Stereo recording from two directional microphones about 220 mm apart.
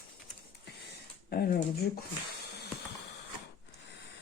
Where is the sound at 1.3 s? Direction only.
45° left (ahead or behind).